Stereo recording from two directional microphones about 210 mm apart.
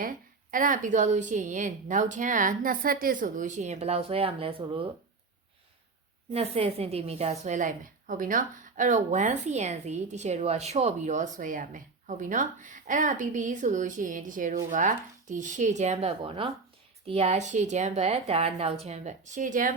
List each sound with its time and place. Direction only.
0.0 s a woman's voice: 40° right (ahead or behind)
6.3 s a woman's voice: 30° right (ahead or behind)